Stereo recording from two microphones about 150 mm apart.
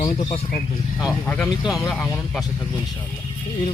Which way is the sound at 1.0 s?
5° left (ahead or behind).